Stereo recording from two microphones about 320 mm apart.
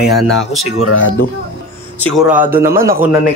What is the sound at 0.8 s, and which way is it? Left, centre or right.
Speech, left.